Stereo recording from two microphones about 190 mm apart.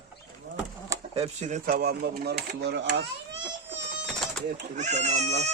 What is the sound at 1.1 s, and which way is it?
Speech, 35° right (ahead or behind).